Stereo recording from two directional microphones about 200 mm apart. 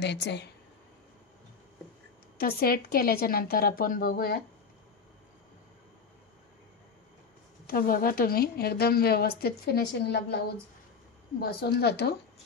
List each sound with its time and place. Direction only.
0.0 s speech: 60° left (ahead or behind)
2.3 s a woman's voice: 50° left (ahead or behind)
7.6 s a woman's voice: 45° left (ahead or behind)
11.3 s speech: 55° left (ahead or behind)